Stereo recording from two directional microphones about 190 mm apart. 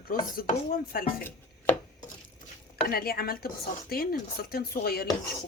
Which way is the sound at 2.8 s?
50° left (ahead or behind).